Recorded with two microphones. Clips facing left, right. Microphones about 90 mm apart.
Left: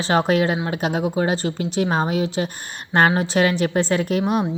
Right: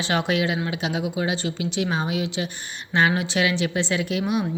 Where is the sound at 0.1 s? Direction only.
40° left (ahead or behind).